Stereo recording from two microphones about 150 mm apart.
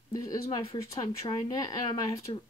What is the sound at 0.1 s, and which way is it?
Speech, 25° left (ahead or behind).